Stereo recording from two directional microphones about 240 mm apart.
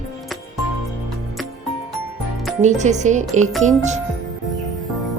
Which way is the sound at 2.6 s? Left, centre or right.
Right.